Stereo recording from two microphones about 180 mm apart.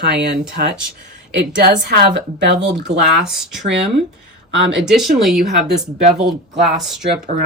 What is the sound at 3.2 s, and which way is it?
Speech, centre (ahead or behind).